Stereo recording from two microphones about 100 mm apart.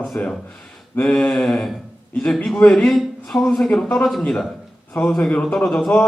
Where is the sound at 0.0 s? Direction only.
10° left (ahead or behind).